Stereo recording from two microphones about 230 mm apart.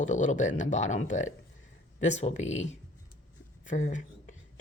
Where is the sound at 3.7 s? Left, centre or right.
Left.